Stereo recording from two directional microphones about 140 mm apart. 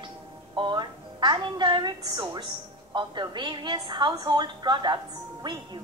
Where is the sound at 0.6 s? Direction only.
35° right (ahead or behind).